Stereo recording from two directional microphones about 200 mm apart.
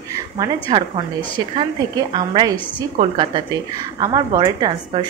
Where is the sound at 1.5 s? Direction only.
25° right (ahead or behind).